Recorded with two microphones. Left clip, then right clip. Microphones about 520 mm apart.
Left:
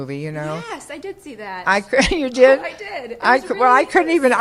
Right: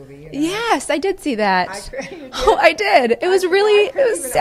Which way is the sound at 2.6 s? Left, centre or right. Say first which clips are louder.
Right 16 dB; right.